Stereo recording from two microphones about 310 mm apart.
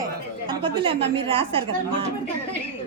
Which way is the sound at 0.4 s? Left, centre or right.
Centre.